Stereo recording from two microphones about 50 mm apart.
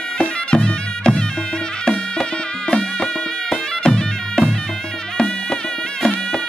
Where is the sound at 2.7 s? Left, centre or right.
Centre.